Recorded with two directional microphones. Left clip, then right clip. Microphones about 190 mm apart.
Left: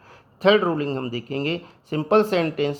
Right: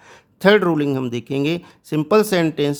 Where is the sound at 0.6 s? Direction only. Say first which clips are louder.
Right 5 dB; 45° right (ahead or behind).